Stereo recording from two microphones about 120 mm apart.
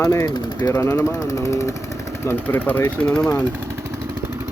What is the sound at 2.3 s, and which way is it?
Speech, 15° left (ahead or behind).